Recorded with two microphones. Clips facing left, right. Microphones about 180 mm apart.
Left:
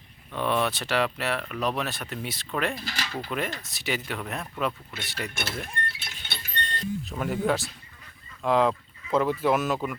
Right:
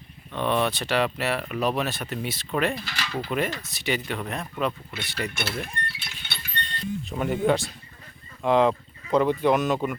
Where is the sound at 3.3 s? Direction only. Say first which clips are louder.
Right 5 dB; centre (ahead or behind).